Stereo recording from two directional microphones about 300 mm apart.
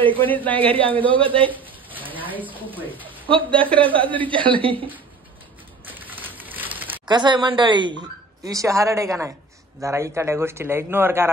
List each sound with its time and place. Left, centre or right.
0.2 s speech: centre
0.6 s a man's voice: centre
1.5 s a sound: centre
2.3 s speech: centre
3.3 s a man's voice: centre
5.9 s a sound: centre
8.5 s a man's voice: centre